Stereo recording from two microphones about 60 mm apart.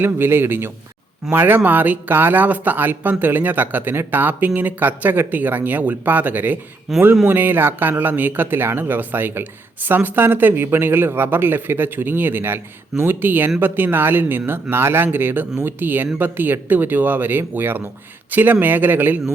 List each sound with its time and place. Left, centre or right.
0.0 s speech: right
6.9 s speech: centre
7.3 s speech: right